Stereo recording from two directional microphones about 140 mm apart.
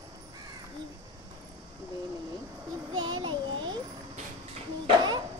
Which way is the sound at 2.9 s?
35° right (ahead or behind).